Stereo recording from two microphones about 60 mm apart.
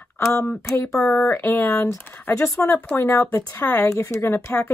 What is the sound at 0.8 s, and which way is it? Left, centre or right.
Speech, centre.